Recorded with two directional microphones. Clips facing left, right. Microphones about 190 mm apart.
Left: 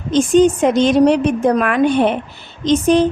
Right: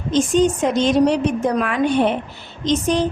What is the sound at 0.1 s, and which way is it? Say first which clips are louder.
A woman's voice: left 5 dB; 60° left (ahead or behind).